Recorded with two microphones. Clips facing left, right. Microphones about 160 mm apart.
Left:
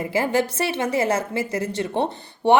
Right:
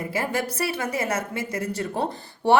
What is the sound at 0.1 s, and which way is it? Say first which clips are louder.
A woman's voice: left 7 dB; 30° left (ahead or behind).